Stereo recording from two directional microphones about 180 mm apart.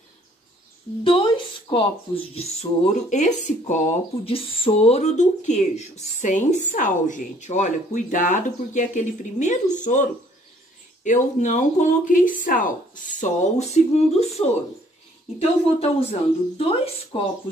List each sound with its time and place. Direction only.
1.0 s speech: 30° left (ahead or behind); by 10.0 s 45° left (ahead or behind)
11.1 s speech: 45° left (ahead or behind)